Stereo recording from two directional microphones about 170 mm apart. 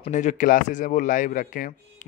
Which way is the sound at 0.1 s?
45° left (ahead or behind).